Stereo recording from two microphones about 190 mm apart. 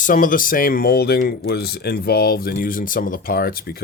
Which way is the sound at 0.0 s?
45° left (ahead or behind).